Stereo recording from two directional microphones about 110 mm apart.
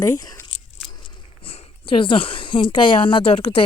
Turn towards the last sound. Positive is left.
turn(degrees=55)  # may be behind; listen again after turning